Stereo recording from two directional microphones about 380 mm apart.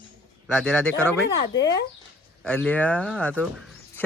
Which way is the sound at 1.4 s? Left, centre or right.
Left.